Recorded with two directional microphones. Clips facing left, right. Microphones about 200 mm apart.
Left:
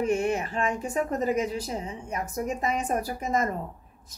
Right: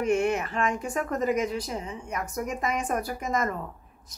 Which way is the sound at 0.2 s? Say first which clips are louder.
Right 1 dB; 30° left (ahead or behind).